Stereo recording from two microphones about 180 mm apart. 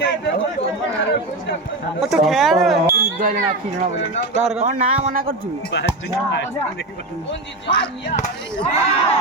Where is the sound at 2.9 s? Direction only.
50° right (ahead or behind).